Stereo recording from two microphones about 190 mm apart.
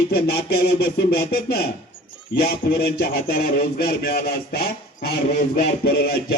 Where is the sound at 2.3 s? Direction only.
55° left (ahead or behind).